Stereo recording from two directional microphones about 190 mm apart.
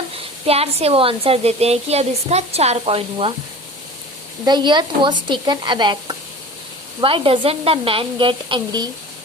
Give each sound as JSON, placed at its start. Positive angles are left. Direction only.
{"t": 0.4, "sound": "a woman's voice", "side_deg": -30}
{"t": 4.4, "sound": "speech", "side_deg": -25}